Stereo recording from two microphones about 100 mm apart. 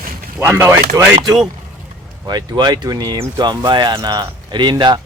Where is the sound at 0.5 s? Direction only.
20° right (ahead or behind).